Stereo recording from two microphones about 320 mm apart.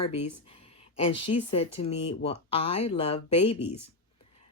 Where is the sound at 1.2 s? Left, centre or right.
Centre.